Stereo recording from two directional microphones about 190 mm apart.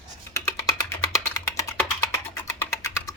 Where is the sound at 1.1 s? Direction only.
15° left (ahead or behind).